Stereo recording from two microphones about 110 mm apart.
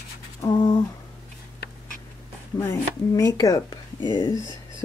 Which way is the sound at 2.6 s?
30° left (ahead or behind).